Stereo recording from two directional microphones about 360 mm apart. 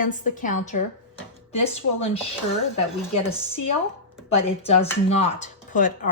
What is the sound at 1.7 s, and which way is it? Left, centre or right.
Speech, centre.